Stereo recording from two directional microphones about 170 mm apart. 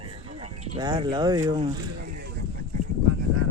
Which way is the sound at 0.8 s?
25° right (ahead or behind).